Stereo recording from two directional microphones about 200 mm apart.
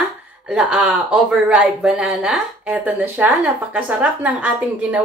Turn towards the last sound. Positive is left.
turn(degrees=-5)  # may be behind; listen again after turning